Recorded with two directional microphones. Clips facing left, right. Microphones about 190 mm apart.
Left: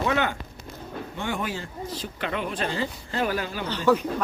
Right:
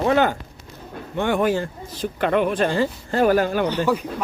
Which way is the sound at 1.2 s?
60° right (ahead or behind).